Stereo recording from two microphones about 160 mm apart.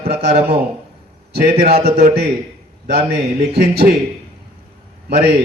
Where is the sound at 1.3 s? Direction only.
70° right (ahead or behind).